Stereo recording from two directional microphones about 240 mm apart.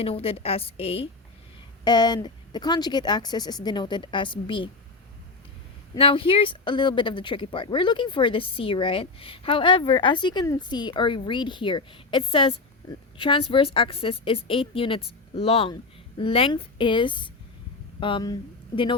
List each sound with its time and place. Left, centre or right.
0.0 s speech: left
5.9 s speech: left